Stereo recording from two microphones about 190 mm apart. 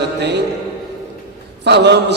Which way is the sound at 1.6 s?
65° right (ahead or behind).